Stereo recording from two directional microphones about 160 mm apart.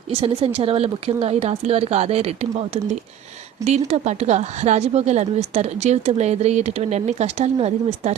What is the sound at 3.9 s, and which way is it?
A woman's voice, 45° right (ahead or behind).